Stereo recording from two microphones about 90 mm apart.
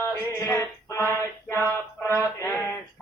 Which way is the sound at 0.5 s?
25° left (ahead or behind).